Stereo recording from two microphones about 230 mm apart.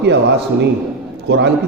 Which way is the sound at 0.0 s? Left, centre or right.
Right.